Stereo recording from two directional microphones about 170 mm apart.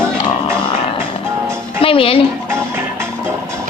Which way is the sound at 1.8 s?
35° left (ahead or behind).